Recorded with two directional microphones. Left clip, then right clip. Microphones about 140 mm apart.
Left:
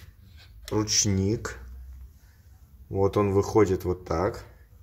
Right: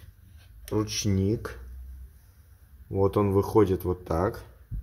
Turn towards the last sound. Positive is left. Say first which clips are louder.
# left 1 dB
turn(degrees=-25)  # may be behind; listen again after turning